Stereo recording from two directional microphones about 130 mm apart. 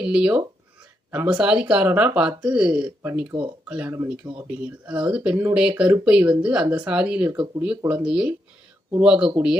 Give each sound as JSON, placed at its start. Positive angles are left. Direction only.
{"t": 0.0, "sound": "speech", "side_deg": -10}
{"t": 3.3, "sound": "speech", "side_deg": -35}
{"t": 3.7, "sound": "speech", "side_deg": -10}